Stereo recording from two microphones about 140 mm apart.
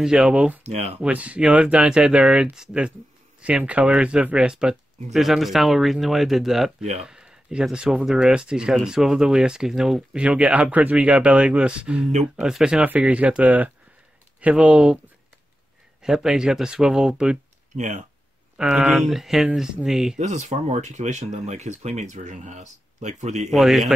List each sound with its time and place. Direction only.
0.0 s speech: 5° right (ahead or behind)
0.7 s speech: 50° right (ahead or behind)
0.9 s speech: 10° right (ahead or behind)
6.8 s speech: 50° right (ahead or behind)
7.1 s speech: 5° right (ahead or behind)
16.0 s speech: 5° right (ahead or behind)
17.7 s speech: 60° right (ahead or behind)
18.6 s speech: 5° right (ahead or behind)
20.2 s speech: 55° right (ahead or behind)
23.5 s speech: centre (ahead or behind)